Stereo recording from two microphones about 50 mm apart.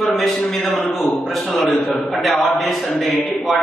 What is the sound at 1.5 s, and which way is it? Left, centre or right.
A man's voice, centre.